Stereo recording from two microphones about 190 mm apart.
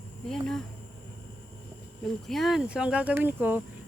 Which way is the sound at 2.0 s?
Centre (ahead or behind).